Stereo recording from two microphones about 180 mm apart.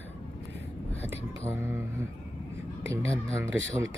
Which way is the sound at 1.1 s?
15° right (ahead or behind).